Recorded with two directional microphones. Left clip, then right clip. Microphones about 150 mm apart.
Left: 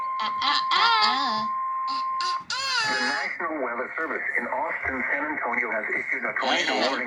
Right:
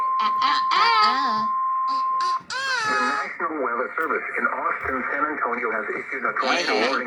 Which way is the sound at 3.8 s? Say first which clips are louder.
Right 4 dB; 30° left (ahead or behind).